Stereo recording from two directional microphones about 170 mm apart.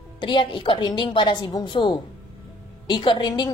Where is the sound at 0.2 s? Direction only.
30° left (ahead or behind).